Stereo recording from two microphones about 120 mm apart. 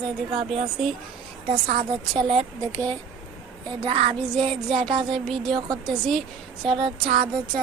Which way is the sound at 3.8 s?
45° right (ahead or behind).